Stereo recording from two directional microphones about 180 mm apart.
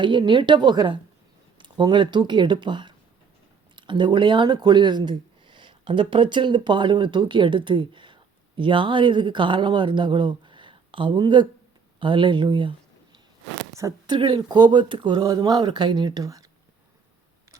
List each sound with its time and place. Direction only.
0.0 s speech: 25° right (ahead or behind)
13.7 s speech: 20° right (ahead or behind)